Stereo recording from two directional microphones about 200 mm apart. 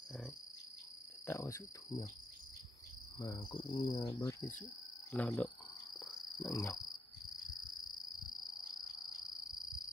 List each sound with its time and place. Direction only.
1.2 s cricket: 15° left (ahead or behind)
3.2 s cricket: 20° left (ahead or behind)
6.4 s cricket: 20° left (ahead or behind)